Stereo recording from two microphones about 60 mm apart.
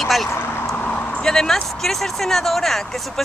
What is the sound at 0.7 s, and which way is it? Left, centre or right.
Vehicle, left.